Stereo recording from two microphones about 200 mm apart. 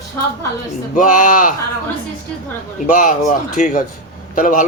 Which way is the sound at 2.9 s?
40° left (ahead or behind).